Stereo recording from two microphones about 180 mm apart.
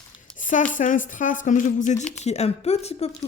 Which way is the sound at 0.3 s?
45° left (ahead or behind).